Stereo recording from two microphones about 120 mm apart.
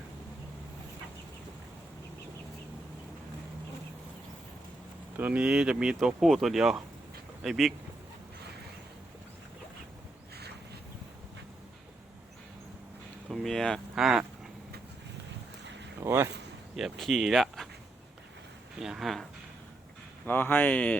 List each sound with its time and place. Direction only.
5.1 s speech: 15° right (ahead or behind)
13.3 s speech: 5° left (ahead or behind)
16.0 s speech: 20° right (ahead or behind)
16.7 s speech: centre (ahead or behind)
18.8 s speech: 5° right (ahead or behind)
20.2 s speech: 15° left (ahead or behind)